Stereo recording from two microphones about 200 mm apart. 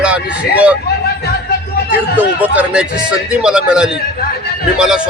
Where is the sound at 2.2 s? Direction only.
10° right (ahead or behind).